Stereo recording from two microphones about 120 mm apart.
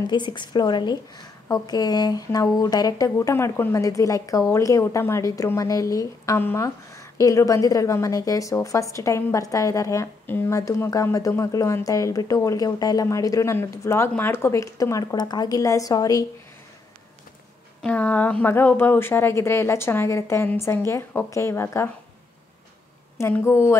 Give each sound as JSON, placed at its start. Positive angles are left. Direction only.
{"t": 0.0, "sound": "a woman's voice", "side_deg": 40}
{"t": 17.8, "sound": "a woman's voice", "side_deg": 15}
{"t": 23.1, "sound": "a woman's voice", "side_deg": 20}